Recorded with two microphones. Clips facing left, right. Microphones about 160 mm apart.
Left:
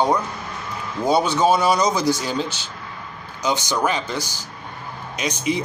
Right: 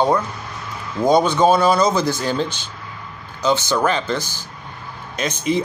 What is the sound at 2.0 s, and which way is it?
Speech, 55° right (ahead or behind).